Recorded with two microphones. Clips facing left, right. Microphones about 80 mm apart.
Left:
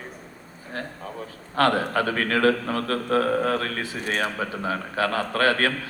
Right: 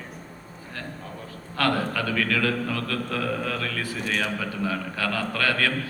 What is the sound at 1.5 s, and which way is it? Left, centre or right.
A man's voice, left.